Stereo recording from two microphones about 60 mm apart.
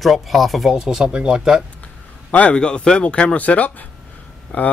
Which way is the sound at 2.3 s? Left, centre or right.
Left.